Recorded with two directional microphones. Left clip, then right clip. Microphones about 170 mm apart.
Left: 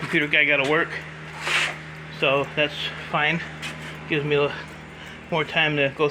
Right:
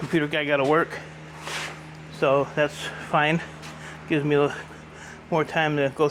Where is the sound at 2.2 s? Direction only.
35° right (ahead or behind).